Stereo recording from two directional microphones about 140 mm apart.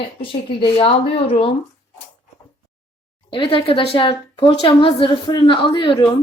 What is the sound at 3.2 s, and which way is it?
Speech, 35° left (ahead or behind).